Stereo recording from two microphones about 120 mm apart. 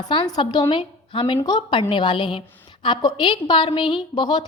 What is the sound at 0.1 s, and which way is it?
A woman's voice, 40° left (ahead or behind).